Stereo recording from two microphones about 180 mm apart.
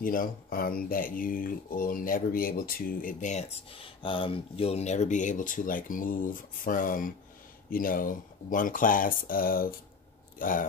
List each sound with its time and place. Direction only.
0.0 s speech: 50° left (ahead or behind)